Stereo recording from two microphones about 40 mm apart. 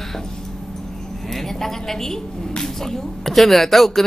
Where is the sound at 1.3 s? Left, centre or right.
Centre.